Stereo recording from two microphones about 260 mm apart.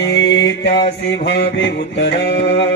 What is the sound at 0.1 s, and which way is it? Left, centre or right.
Mantra, left.